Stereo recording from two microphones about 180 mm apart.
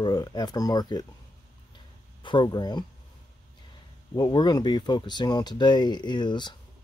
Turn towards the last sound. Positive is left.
turn(degrees=25)  # may be behind; listen again after turning